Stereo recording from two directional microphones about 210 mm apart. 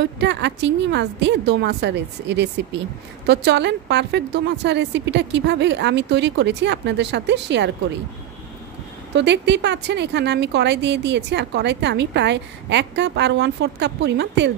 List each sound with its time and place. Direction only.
0.0 s a woman's voice: 55° right (ahead or behind)
9.1 s a woman's voice: 55° right (ahead or behind)